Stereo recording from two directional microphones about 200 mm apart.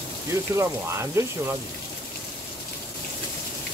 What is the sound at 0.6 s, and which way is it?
Speech, 15° right (ahead or behind).